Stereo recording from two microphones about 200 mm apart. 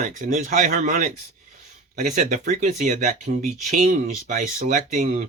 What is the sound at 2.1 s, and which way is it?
Speech, 35° right (ahead or behind).